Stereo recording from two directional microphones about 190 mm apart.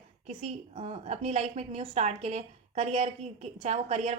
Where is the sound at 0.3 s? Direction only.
30° right (ahead or behind).